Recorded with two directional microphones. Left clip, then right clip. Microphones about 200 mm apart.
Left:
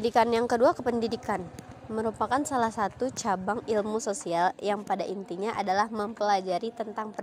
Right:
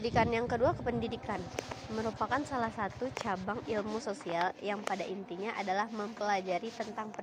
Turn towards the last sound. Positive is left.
turn(degrees=55)  # may be behind; listen again after turning